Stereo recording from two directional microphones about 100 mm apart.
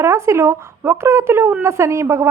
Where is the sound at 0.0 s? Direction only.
30° right (ahead or behind).